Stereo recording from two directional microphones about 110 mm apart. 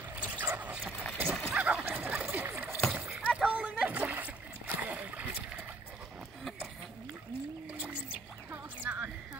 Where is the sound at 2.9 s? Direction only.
10° right (ahead or behind).